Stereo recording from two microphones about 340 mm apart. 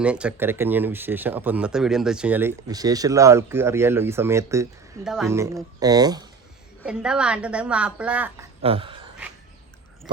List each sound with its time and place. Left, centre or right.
0.0 s a woman's voice: centre
8.6 s speech: centre